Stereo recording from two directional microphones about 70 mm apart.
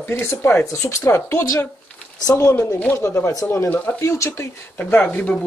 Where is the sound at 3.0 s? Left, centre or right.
Left.